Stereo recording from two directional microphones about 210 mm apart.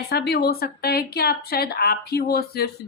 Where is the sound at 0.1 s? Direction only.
50° left (ahead or behind).